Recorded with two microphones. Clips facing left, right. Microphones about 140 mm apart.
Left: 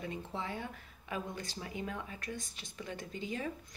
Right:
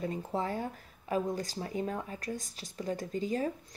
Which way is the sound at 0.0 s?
40° right (ahead or behind).